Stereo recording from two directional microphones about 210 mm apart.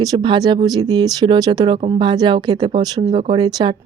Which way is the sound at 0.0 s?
20° right (ahead or behind).